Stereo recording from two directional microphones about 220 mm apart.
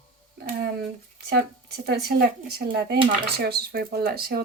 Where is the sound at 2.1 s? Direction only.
45° right (ahead or behind).